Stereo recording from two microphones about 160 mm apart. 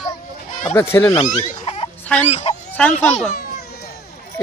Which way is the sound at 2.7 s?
10° left (ahead or behind).